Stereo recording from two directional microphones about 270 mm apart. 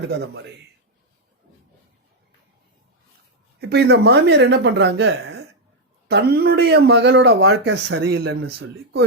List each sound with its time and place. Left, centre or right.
3.6 s speech: right